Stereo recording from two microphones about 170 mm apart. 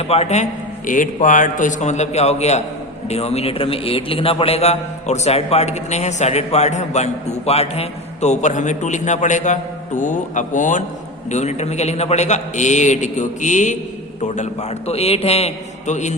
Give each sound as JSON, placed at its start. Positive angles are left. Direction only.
{"t": 0.0, "sound": "a man's voice", "side_deg": 35}
{"t": 0.9, "sound": "a man's voice", "side_deg": 50}